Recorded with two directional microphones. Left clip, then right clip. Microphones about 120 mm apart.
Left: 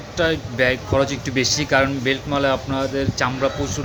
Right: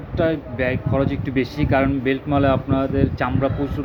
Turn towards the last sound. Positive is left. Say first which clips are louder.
# left 1 dB
turn(degrees=-10)  # may be behind; listen again after turning